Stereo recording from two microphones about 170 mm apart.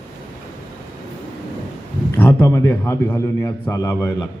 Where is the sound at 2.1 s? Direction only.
15° left (ahead or behind).